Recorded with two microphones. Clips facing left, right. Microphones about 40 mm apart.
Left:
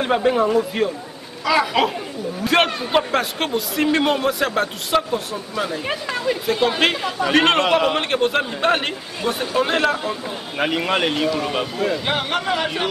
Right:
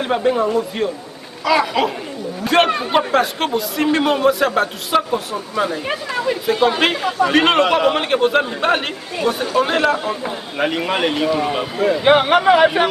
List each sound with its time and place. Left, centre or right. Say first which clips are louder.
0.0 s a man's voice: right 1 dB; centre
11.2 s a man's voice: right 3 dB; centre
12.0 s speech: right 9 dB; right